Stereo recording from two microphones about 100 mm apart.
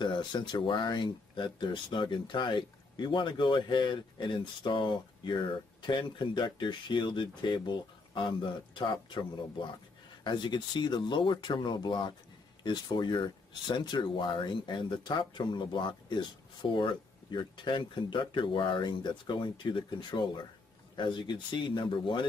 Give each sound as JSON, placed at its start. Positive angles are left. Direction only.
{"t": 0.0, "sound": "speech", "side_deg": 50}
{"t": 10.2, "sound": "speech", "side_deg": 50}